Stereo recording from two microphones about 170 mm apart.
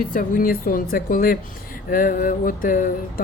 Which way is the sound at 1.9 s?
55° left (ahead or behind).